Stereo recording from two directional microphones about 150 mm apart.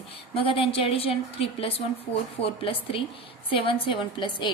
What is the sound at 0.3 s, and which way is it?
A woman's voice, 35° left (ahead or behind).